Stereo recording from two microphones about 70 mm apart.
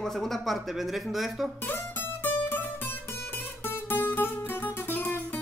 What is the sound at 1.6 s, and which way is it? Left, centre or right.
Music, left.